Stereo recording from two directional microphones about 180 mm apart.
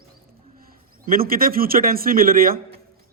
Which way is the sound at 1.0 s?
55° right (ahead or behind).